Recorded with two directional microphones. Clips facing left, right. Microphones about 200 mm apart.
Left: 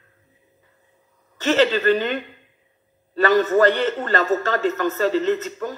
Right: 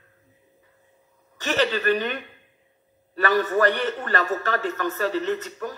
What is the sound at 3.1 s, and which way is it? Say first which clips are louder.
A man's voice: left 5 dB; 25° left (ahead or behind).